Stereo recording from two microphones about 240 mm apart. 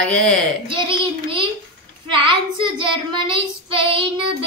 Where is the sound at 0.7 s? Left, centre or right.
Right.